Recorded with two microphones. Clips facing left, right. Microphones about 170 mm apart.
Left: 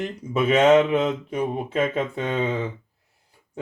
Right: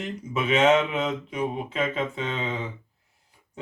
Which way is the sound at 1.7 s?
45° left (ahead or behind).